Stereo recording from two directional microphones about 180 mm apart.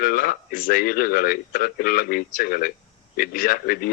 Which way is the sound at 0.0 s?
55° left (ahead or behind).